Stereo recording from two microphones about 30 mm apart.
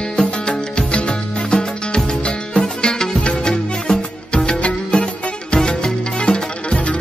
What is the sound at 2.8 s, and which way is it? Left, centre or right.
Music, left.